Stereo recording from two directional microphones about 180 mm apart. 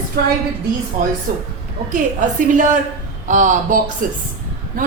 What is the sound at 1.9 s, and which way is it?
A woman's voice, 45° right (ahead or behind).